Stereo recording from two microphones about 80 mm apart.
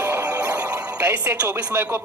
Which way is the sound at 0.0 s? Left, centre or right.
Right.